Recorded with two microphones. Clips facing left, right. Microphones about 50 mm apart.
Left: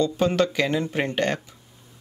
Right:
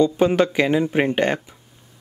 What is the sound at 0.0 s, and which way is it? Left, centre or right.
Speech, centre.